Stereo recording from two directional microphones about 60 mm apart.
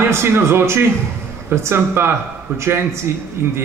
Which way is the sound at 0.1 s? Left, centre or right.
Right.